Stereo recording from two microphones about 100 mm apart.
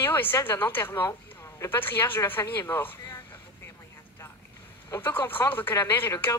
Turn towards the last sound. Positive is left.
turn(degrees=25)  # may be behind; listen again after turning